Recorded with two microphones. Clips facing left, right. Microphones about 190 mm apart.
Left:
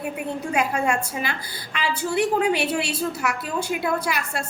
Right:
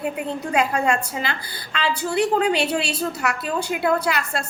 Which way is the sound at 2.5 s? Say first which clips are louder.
Right 1 dB; 75° right (ahead or behind).